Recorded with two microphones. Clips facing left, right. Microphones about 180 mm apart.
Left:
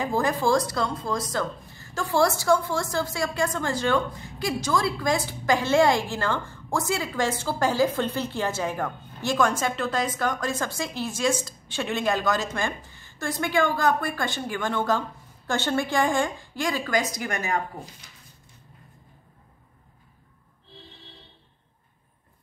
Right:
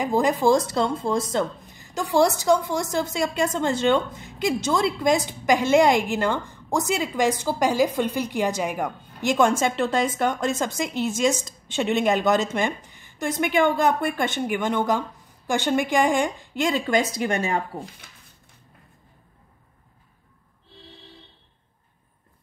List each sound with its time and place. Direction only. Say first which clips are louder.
0.0 s a woman's voice: right 4 dB; 20° right (ahead or behind)